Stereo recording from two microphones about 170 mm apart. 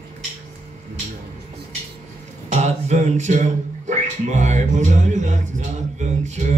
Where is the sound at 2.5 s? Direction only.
40° right (ahead or behind).